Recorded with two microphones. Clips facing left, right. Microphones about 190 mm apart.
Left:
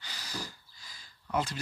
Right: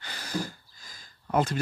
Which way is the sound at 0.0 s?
55° right (ahead or behind).